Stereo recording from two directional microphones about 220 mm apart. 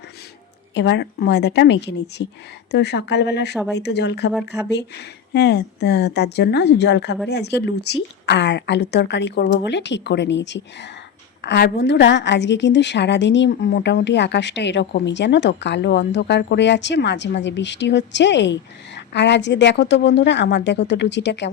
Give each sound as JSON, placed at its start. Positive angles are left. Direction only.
{"t": 0.7, "sound": "a woman's voice", "side_deg": 50}